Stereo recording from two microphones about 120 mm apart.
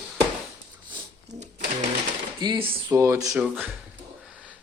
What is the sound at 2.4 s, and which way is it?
Speech, 45° right (ahead or behind).